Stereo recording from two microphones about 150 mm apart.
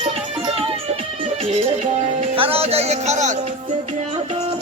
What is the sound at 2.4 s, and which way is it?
Speech, 40° right (ahead or behind).